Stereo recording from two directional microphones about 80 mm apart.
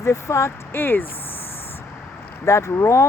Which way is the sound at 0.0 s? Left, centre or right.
Left.